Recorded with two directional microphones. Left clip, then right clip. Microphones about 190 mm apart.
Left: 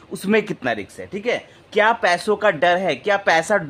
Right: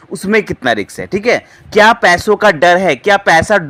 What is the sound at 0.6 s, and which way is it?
Speech, 30° right (ahead or behind).